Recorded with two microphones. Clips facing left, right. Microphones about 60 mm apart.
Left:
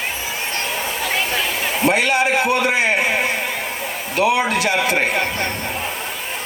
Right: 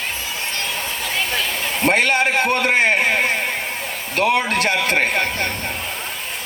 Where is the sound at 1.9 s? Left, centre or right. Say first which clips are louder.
Even; right.